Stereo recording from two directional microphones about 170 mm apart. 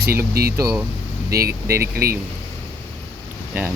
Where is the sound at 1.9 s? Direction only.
65° right (ahead or behind).